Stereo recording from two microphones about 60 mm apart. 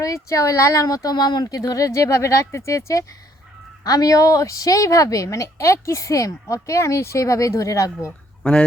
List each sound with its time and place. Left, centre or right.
0.0 s speech: left
1.9 s a woman's voice: left
3.8 s a woman's voice: left